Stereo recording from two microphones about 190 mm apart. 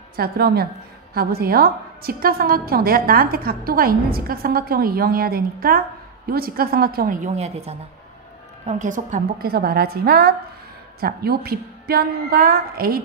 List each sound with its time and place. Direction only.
0.1 s a woman's voice: 55° right (ahead or behind)